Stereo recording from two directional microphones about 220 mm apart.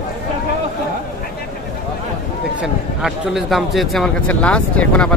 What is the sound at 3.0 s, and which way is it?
Speech, centre (ahead or behind).